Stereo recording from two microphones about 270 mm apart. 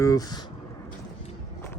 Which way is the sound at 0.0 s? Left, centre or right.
Centre.